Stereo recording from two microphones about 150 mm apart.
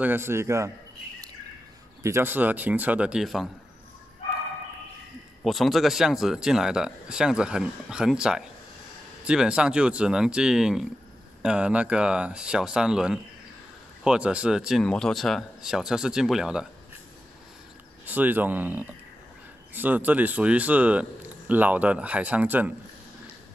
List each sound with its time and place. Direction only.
0.0 s speech: 15° right (ahead or behind)
2.0 s speech: 15° right (ahead or behind)
5.4 s speech: centre (ahead or behind)
18.0 s speech: 10° right (ahead or behind)